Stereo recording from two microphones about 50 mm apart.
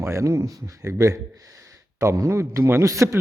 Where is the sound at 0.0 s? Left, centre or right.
Right.